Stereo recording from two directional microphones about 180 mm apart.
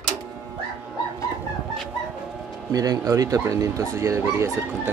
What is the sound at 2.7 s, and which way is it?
A man's voice, 20° right (ahead or behind).